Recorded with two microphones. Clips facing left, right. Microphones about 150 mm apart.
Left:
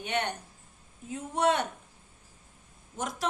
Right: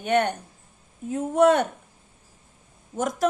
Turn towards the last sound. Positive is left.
turn(degrees=-45)  # may be behind; listen again after turning